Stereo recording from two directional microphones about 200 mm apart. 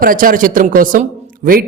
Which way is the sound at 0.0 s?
45° right (ahead or behind).